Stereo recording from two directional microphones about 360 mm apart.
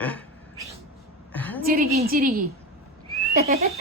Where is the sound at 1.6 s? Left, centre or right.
Right.